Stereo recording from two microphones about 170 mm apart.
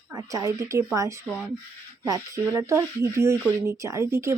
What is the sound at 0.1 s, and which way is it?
Speech, 20° right (ahead or behind).